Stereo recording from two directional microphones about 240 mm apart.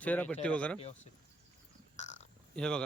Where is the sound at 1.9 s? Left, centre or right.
Left.